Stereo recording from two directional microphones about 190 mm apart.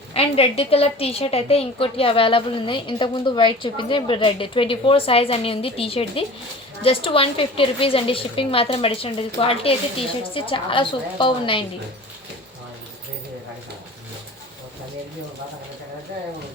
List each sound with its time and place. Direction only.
0.1 s a woman's voice: 30° left (ahead or behind)